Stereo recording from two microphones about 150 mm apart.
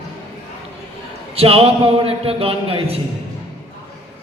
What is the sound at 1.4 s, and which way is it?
A man's voice, 40° right (ahead or behind).